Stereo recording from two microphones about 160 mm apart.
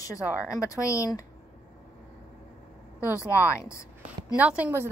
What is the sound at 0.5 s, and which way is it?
Speech, 20° left (ahead or behind).